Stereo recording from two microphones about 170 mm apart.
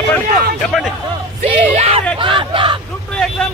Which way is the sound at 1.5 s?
35° right (ahead or behind).